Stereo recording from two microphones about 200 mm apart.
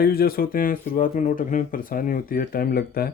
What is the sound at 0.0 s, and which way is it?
Speech, 50° left (ahead or behind).